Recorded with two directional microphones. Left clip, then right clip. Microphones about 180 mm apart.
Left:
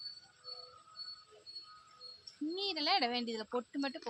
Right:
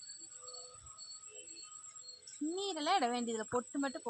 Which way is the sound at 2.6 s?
45° right (ahead or behind).